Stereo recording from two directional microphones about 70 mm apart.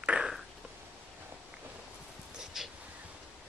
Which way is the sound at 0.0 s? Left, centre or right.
Centre.